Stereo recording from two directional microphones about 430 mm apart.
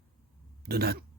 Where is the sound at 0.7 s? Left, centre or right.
Right.